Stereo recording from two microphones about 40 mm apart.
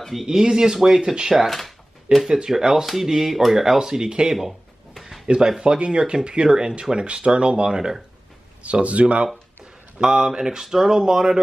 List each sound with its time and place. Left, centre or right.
0.1 s speech: centre
4.4 s a sound: centre
5.2 s speech: centre
8.6 s speech: right
10.0 s speech: centre